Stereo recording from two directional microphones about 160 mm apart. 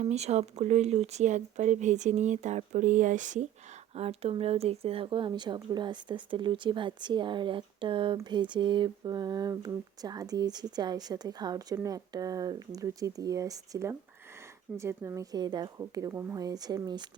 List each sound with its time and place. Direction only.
0.0 s speech: 45° right (ahead or behind)
3.9 s speech: 40° right (ahead or behind)